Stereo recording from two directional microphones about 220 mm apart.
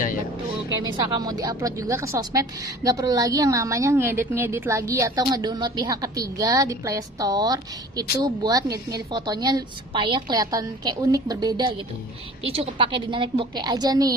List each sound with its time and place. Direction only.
1.0 s a woman's voice: 20° right (ahead or behind)